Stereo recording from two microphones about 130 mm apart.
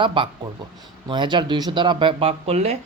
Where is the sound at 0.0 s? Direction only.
40° right (ahead or behind).